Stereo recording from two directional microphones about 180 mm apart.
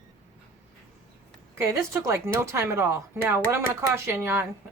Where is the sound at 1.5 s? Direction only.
15° right (ahead or behind).